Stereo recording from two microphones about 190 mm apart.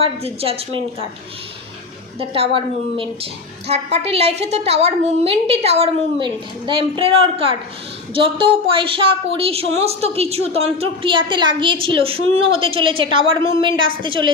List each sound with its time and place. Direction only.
0.0 s a woman's voice: 30° right (ahead or behind)
2.1 s a woman's voice: 30° right (ahead or behind)
3.7 s a woman's voice: 35° right (ahead or behind)